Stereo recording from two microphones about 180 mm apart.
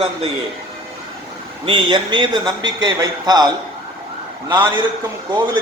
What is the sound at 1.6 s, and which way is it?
A man's voice, 25° right (ahead or behind).